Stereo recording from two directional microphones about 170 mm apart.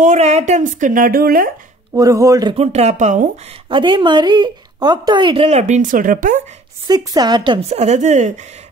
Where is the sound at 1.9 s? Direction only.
20° right (ahead or behind).